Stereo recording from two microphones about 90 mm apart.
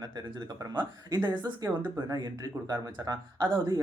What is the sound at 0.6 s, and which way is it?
Speech, 55° right (ahead or behind).